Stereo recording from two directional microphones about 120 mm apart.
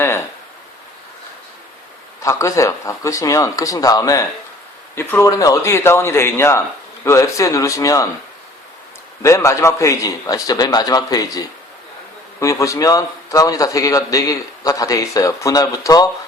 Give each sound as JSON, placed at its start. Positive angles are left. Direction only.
{"t": 2.2, "sound": "a man's voice", "side_deg": 25}
{"t": 9.2, "sound": "a man's voice", "side_deg": 25}